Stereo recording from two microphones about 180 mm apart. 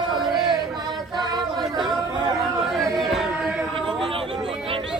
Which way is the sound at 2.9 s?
Centre (ahead or behind).